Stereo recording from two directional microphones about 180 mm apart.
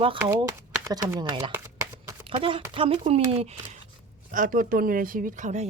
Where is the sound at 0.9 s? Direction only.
15° right (ahead or behind).